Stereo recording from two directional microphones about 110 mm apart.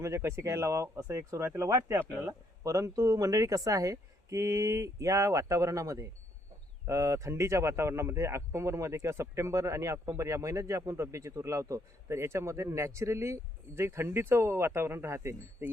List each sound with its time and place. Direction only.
0.0 s speech: 25° right (ahead or behind)